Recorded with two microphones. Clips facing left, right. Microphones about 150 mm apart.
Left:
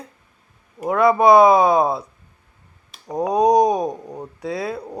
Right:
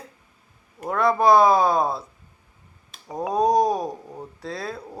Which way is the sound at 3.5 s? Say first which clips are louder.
Left 5 dB; 15° left (ahead or behind).